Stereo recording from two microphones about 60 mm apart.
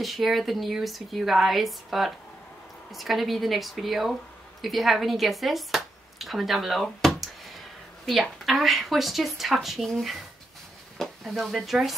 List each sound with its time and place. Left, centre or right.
0.0 s speech: centre
11.0 s stir: centre
11.6 s speech: centre